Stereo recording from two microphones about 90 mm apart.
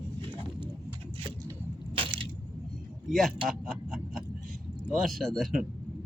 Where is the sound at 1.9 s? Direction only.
75° right (ahead or behind).